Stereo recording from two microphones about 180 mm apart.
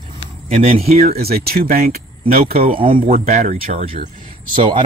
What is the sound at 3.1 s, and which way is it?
Speech, 45° right (ahead or behind).